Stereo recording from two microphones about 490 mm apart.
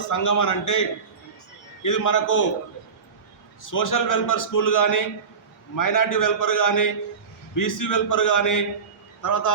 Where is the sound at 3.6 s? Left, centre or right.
Left.